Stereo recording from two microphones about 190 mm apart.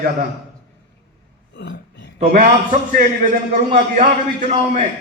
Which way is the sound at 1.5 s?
65° left (ahead or behind).